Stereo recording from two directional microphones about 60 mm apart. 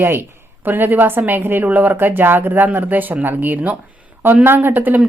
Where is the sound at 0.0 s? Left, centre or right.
Right.